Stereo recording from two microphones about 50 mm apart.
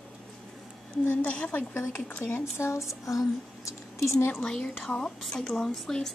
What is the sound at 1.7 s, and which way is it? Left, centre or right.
Speech, left.